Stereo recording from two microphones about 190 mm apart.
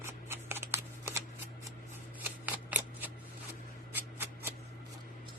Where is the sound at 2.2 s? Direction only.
10° right (ahead or behind).